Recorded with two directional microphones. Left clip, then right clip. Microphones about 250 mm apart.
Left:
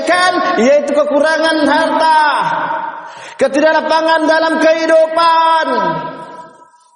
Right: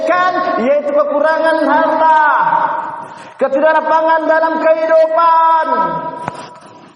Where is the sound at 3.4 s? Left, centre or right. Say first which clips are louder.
Even; left.